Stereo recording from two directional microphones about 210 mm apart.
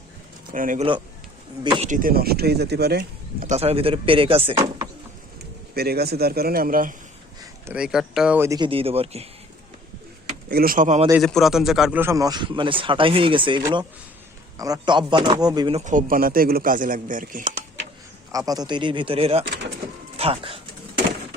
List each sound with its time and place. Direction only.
0.5 s a man's voice: 40° right (ahead or behind)
3.5 s a man's voice: 30° right (ahead or behind)
5.7 s speech: 50° right (ahead or behind)
7.7 s speech: 5° right (ahead or behind); by 9.2 s 30° right (ahead or behind)
10.5 s a man's voice: 45° right (ahead or behind)
11.2 s a man's voice: centre (ahead or behind); by 15.8 s 20° right (ahead or behind)
15.8 s a man's voice: 40° right (ahead or behind)
18.3 s a man's voice: 15° right (ahead or behind)